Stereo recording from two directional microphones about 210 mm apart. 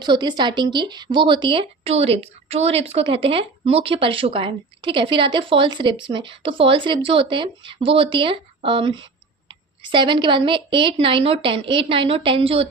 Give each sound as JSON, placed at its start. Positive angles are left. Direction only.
{"t": 0.0, "sound": "speech", "side_deg": -20}